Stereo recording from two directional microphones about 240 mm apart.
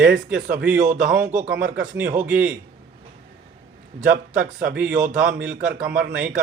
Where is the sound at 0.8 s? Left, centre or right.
Right.